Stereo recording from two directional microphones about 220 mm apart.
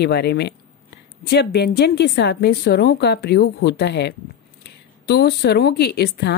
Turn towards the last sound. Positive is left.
turn(degrees=50)  # may be behind; listen again after turning